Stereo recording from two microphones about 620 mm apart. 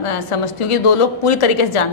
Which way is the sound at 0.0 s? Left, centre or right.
Left.